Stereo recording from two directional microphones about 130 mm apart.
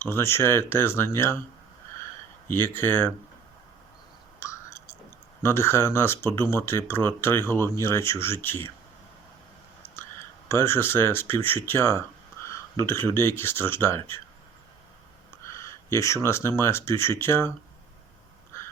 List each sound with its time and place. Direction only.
0.0 s speech: 20° left (ahead or behind)
2.5 s speech: 15° left (ahead or behind)
4.4 s whispering: 20° left (ahead or behind)
5.4 s speech: 20° left (ahead or behind)
9.8 s a sound: 20° left (ahead or behind)
10.5 s speech: 20° left (ahead or behind)
15.4 s speech: 25° left (ahead or behind)
18.5 s crow: 20° left (ahead or behind)